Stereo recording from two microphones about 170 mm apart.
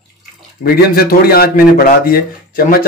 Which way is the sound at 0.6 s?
60° left (ahead or behind).